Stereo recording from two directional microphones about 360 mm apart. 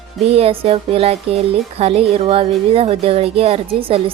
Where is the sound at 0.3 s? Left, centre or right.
Centre.